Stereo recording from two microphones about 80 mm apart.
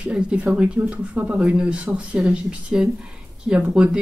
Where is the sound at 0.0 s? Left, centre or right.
Centre.